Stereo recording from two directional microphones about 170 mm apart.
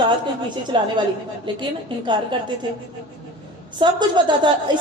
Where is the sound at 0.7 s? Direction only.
30° right (ahead or behind).